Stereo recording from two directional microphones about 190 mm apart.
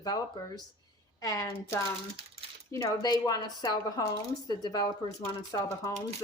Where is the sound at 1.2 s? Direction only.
15° left (ahead or behind).